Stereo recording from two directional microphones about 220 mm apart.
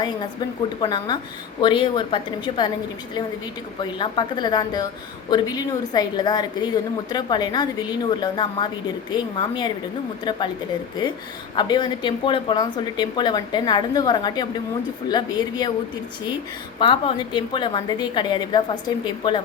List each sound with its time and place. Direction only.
0.8 s a woman's voice: 20° left (ahead or behind)
3.8 s a woman's voice: 20° left (ahead or behind)
11.5 s a woman's voice: 20° left (ahead or behind)
16.8 s a woman's voice: 20° left (ahead or behind)